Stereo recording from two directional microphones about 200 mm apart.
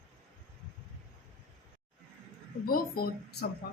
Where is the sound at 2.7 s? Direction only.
50° left (ahead or behind).